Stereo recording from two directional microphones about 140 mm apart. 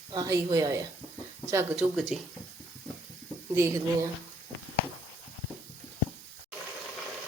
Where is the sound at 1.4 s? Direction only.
20° right (ahead or behind).